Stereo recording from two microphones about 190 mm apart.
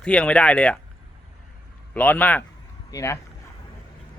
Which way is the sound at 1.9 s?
10° left (ahead or behind).